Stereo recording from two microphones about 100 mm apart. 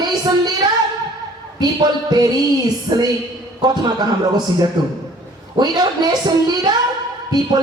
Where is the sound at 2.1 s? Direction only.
40° right (ahead or behind).